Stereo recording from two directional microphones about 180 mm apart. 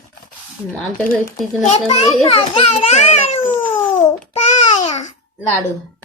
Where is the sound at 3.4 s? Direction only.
10° left (ahead or behind).